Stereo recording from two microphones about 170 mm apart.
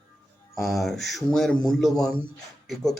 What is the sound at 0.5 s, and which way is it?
Speech, centre (ahead or behind).